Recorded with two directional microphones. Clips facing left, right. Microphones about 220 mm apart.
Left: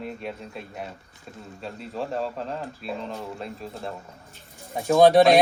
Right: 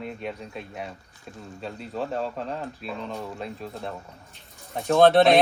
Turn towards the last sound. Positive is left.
turn(degrees=15)  # may be behind; listen again after turning